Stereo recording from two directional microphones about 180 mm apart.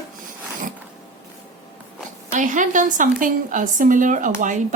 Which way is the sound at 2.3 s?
45° right (ahead or behind).